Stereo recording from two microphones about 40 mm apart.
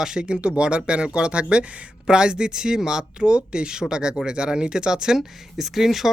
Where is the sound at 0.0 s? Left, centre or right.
Centre.